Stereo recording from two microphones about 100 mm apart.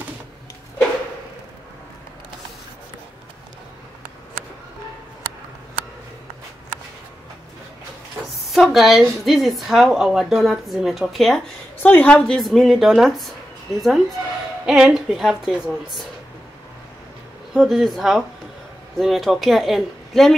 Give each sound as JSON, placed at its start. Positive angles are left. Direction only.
{"t": 8.3, "sound": "a woman's voice", "side_deg": 0}
{"t": 11.8, "sound": "a woman's voice", "side_deg": 15}
{"t": 12.2, "sound": "a woman's voice", "side_deg": 5}
{"t": 17.6, "sound": "a woman's voice", "side_deg": 0}